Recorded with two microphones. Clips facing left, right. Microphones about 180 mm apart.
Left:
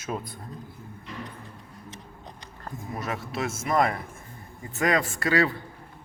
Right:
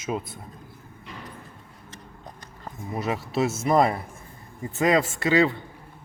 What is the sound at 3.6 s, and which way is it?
A man's voice, 30° right (ahead or behind).